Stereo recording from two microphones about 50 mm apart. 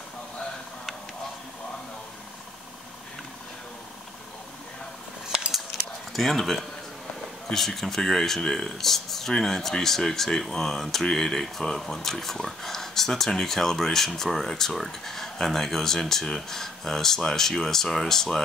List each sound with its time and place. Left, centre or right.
6.1 s speech: centre